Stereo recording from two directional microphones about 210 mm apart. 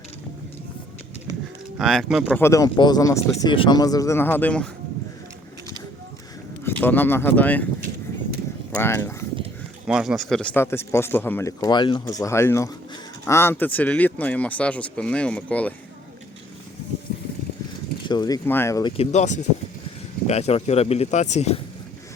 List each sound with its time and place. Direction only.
1.8 s speech: centre (ahead or behind)
2.4 s speech: 15° left (ahead or behind)
6.7 s speech: 10° left (ahead or behind)
8.7 s speech: 10° left (ahead or behind)
9.8 s speech: 5° right (ahead or behind)
18.1 s speech: 20° left (ahead or behind)